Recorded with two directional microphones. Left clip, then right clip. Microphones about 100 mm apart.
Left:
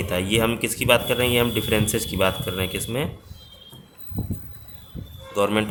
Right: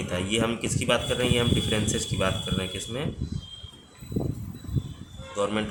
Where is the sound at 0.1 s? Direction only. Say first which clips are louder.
Left 5 dB; 50° left (ahead or behind).